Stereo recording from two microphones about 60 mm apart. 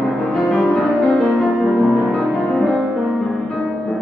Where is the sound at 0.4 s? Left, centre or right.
Centre.